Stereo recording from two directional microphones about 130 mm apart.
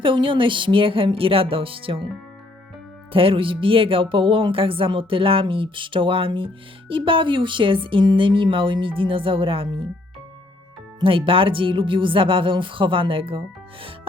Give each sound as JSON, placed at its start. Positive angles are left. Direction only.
{"t": 0.0, "sound": "speech", "side_deg": -40}
{"t": 3.1, "sound": "a woman's voice", "side_deg": -45}
{"t": 11.0, "sound": "a woman's voice", "side_deg": -45}